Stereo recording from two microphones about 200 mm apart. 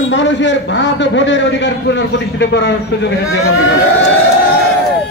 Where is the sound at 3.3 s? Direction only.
80° left.